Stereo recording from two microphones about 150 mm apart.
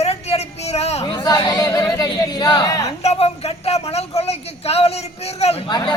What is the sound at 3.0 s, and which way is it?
Speech, 40° left (ahead or behind).